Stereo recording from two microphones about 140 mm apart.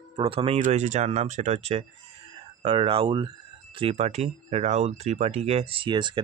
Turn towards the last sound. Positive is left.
turn(degrees=-35)  # may be behind; listen again after turning